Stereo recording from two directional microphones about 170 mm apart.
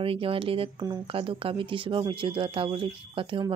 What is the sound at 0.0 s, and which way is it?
Speech, 30° right (ahead or behind).